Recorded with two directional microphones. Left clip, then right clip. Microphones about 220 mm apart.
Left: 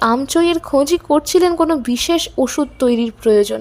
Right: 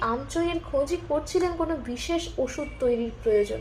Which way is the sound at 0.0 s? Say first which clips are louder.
Left 12 dB; 45° left (ahead or behind).